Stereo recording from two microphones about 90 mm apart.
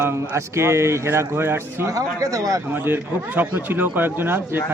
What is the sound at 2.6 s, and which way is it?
Speech, 25° right (ahead or behind).